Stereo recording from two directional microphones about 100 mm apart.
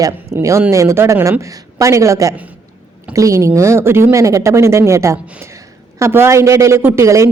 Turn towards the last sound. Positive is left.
turn(degrees=-30)  # may be behind; listen again after turning